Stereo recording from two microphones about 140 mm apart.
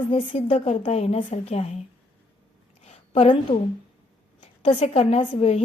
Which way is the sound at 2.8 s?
45° left (ahead or behind).